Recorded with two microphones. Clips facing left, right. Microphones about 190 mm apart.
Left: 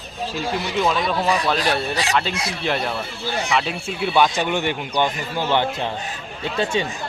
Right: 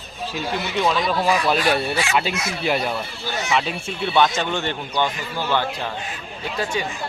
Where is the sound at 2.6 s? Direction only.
5° right (ahead or behind); by 5.6 s 20° left (ahead or behind).